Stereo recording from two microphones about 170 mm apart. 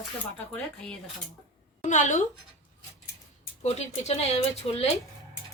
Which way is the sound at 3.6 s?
40° left (ahead or behind).